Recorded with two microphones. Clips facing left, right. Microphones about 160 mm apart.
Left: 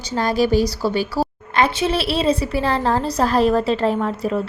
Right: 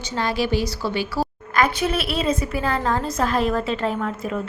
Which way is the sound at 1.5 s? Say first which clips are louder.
Left 2 dB; 30° left (ahead or behind).